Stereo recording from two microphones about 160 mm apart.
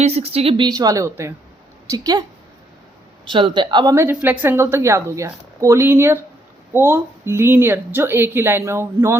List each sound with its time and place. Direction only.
0.0 s a woman's voice: 40° right (ahead or behind); by 2.2 s 20° right (ahead or behind)
3.2 s a woman's voice: 30° right (ahead or behind)
3.9 s a woman's voice: 15° right (ahead or behind)